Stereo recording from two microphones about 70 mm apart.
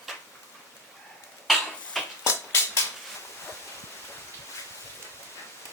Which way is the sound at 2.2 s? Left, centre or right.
Left.